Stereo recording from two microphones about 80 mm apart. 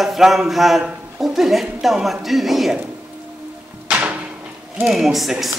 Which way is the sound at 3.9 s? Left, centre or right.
Centre.